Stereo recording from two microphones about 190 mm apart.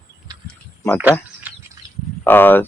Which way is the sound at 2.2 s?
10° left (ahead or behind).